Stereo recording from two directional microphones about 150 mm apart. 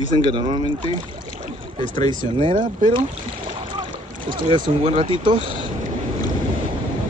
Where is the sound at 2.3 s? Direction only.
35° right (ahead or behind).